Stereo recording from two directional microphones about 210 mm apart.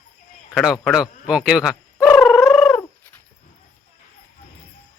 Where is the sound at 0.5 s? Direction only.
Centre (ahead or behind).